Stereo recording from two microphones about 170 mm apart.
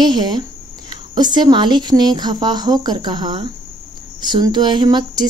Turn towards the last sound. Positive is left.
turn(degrees=-25)  # may be behind; listen again after turning